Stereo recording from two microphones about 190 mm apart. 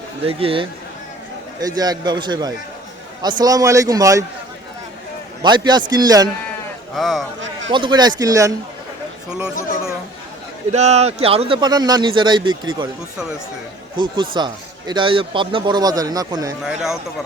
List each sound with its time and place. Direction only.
0.3 s speech: 30° right (ahead or behind)
5.4 s speech: 25° right (ahead or behind)
6.9 s speech: centre (ahead or behind)
7.7 s speech: 25° right (ahead or behind)
10.7 s speech: 35° right (ahead or behind)
13.9 s speech: 25° right (ahead or behind)
16.6 s speech: 5° right (ahead or behind)